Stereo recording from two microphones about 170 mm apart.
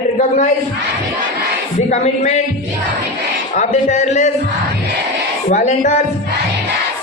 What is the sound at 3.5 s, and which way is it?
Speech, 45° left (ahead or behind).